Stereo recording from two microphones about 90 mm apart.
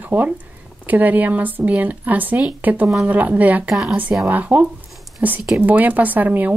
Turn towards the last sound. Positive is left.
turn(degrees=-20)  # may be behind; listen again after turning